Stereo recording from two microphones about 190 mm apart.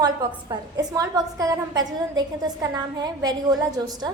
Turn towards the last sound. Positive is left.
turn(degrees=-20)  # may be behind; listen again after turning